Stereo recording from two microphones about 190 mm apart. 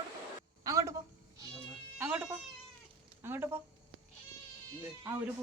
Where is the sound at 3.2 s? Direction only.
10° right (ahead or behind).